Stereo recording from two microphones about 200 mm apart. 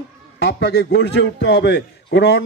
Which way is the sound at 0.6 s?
55° left (ahead or behind).